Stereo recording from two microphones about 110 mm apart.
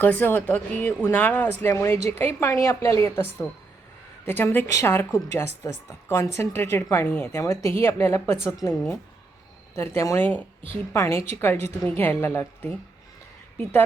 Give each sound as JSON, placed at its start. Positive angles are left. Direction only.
{"t": 0.0, "sound": "a woman's voice", "side_deg": 15}
{"t": 4.3, "sound": "a woman's voice", "side_deg": 20}
{"t": 9.7, "sound": "a woman's voice", "side_deg": 25}